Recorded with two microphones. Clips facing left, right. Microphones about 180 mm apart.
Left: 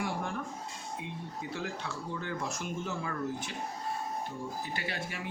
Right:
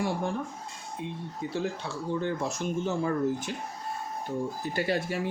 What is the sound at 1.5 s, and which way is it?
Speech, 30° right (ahead or behind).